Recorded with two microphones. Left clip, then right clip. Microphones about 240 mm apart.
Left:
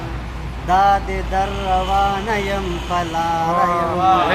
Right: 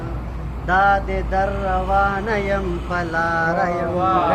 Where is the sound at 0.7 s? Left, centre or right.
Left.